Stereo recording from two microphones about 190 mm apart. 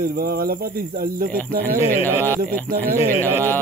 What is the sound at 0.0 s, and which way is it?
A man's voice, 50° right (ahead or behind).